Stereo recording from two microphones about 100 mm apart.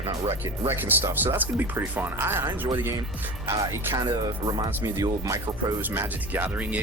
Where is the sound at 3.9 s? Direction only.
40° right (ahead or behind).